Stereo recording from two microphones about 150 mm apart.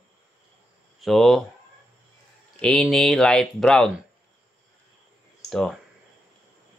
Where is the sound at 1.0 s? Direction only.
Centre (ahead or behind).